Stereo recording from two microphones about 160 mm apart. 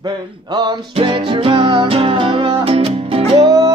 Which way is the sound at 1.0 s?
30° right (ahead or behind).